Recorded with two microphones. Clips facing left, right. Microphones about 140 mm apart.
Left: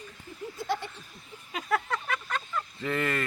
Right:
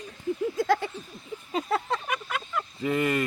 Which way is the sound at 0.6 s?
90° right.